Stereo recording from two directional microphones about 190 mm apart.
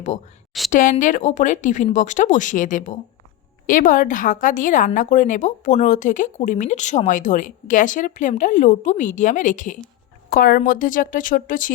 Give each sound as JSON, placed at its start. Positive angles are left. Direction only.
{"t": 0.7, "sound": "a woman's voice", "side_deg": 45}